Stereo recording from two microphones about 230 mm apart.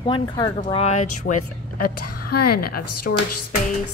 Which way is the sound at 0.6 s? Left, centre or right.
Left.